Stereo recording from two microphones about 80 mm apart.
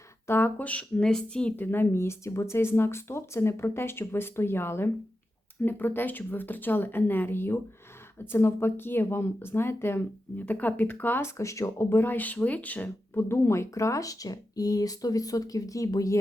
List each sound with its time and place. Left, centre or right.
0.3 s speech: left; by 1.5 s centre
1.5 s a woman's voice: left